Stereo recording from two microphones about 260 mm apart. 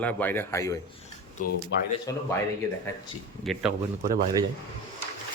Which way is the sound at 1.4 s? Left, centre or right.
Left.